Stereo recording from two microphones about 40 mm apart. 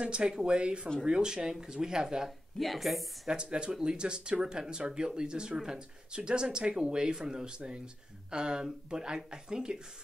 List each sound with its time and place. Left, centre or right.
0.0 s speech: right
2.6 s a woman's voice: centre
3.4 s speech: right